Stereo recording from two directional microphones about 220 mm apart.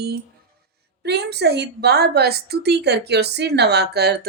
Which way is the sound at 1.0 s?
50° right (ahead or behind).